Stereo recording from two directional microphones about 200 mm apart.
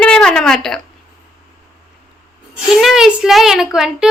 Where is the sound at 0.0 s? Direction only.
5° left (ahead or behind).